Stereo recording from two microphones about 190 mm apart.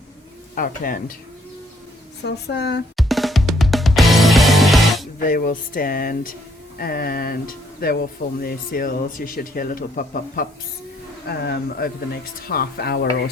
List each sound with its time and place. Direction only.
0.5 s speech: 50° left (ahead or behind)
2.2 s speech: 65° left (ahead or behind)
2.9 s drum: centre (ahead or behind)
5.2 s speech: 45° left (ahead or behind)